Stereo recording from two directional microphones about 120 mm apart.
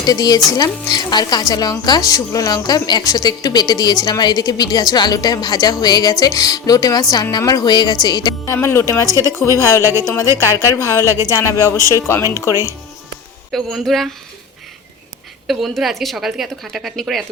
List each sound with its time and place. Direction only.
0.0 s speech: 35° left (ahead or behind)
8.5 s a woman's voice: 20° left (ahead or behind)
9.0 s speech: 25° right (ahead or behind)
9.6 s a woman's voice: 25° left (ahead or behind)
9.8 s speech: 25° right (ahead or behind)
10.5 s a woman's voice: 25° left (ahead or behind)
13.5 s a woman's voice: centre (ahead or behind)
15.4 s a woman's voice: centre (ahead or behind)